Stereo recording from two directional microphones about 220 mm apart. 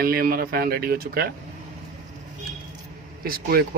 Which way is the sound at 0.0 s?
45° right (ahead or behind).